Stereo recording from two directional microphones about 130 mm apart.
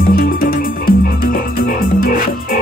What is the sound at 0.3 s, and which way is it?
Music, 90° left.